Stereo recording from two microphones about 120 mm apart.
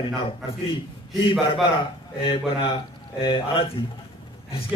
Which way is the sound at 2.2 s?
55° left (ahead or behind).